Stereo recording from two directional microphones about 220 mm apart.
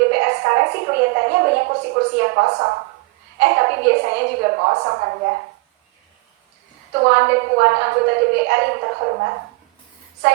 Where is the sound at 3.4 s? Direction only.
45° right (ahead or behind).